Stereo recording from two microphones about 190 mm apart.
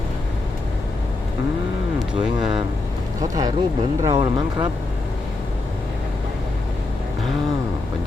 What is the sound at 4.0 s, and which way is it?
Speech, 20° right (ahead or behind).